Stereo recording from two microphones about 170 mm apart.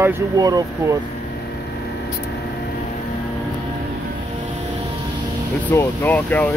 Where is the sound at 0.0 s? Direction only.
20° right (ahead or behind).